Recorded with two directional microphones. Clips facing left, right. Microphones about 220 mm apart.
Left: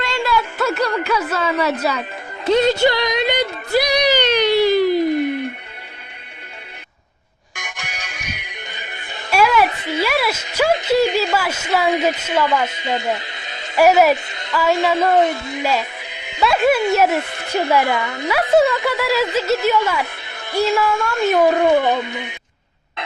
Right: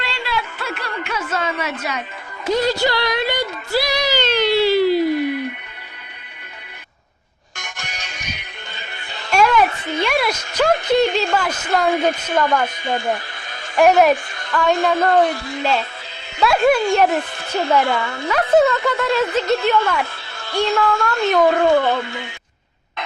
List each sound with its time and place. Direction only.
0.0 s a sound: 45° left (ahead or behind)
2.5 s music: 25° left (ahead or behind)
7.8 s music: 10° left (ahead or behind)
9.3 s a sound: 5° left (ahead or behind)
9.6 s a sound: 20° left (ahead or behind)
10.0 s a woman's voice: 5° left (ahead or behind)
12.6 s speech: 20° left (ahead or behind)
13.7 s a woman's voice: 5° left (ahead or behind)
15.1 s speech: 20° left (ahead or behind)
15.6 s music: 15° left (ahead or behind)
16.4 s speech: centre (ahead or behind); by 18.3 s 20° left (ahead or behind)
18.3 s a woman's voice: 10° left (ahead or behind)